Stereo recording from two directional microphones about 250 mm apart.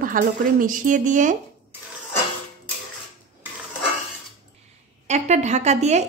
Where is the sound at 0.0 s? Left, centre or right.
Right.